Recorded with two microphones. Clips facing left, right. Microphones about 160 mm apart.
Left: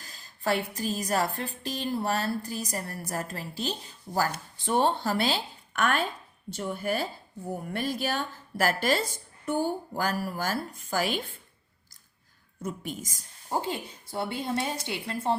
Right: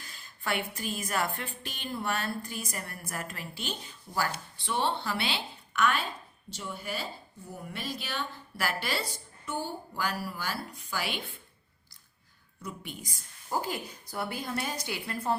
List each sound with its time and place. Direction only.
0.0 s a woman's voice: 40° left (ahead or behind)
12.6 s a woman's voice: 45° left (ahead or behind)
13.5 s a woman's voice: 25° left (ahead or behind)